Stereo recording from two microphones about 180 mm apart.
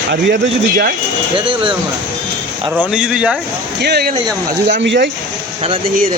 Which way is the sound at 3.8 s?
65° right (ahead or behind).